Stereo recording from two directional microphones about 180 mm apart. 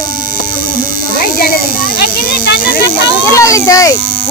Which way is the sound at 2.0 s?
55° left (ahead or behind).